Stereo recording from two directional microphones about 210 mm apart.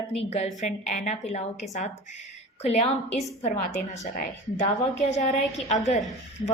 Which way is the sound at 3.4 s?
35° left (ahead or behind).